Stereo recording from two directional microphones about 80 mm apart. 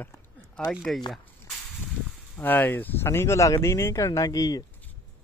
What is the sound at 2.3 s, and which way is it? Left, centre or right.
Speech, left.